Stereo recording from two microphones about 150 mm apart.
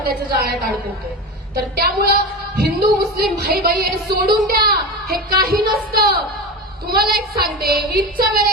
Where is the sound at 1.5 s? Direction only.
90° right.